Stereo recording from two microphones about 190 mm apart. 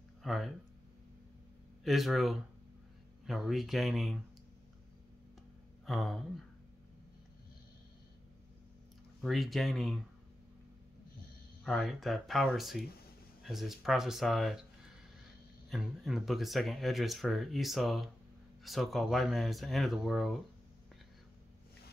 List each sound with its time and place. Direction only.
0.2 s speech: centre (ahead or behind)
1.9 s speech: centre (ahead or behind)
5.9 s speech: centre (ahead or behind)
9.2 s speech: centre (ahead or behind)
11.6 s speech: centre (ahead or behind)
15.7 s speech: centre (ahead or behind)